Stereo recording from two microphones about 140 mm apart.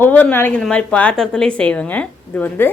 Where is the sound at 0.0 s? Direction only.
10° left (ahead or behind).